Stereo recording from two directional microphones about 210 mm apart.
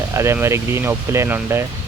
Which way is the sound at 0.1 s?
10° right (ahead or behind).